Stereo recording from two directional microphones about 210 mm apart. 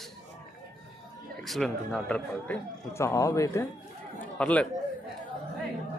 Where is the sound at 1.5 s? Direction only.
Centre (ahead or behind).